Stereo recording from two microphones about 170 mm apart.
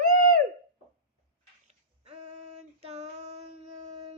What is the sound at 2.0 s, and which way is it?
Female singing, 40° right (ahead or behind).